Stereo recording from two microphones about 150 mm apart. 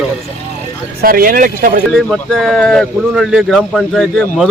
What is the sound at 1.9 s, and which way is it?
Speech, centre (ahead or behind).